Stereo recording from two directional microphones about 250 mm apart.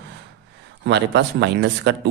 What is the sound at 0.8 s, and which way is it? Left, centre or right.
A man's voice, right.